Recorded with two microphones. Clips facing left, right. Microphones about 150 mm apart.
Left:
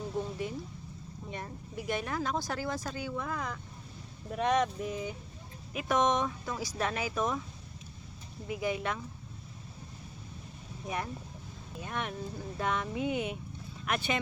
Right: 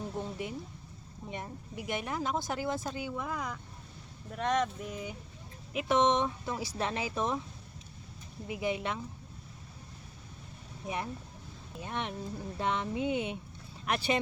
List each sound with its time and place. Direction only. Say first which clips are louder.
0.2 s a sound: left 4 dB; 20° right (ahead or behind)
1.3 s speech: right 1 dB; 15° right (ahead or behind)
4.4 s speech: left 2 dB; 5° left (ahead or behind)
5.7 s speech: right 1 dB; 25° right (ahead or behind)
8.4 s speech: even; 20° right (ahead or behind)
10.8 s speech: even; 25° right (ahead or behind)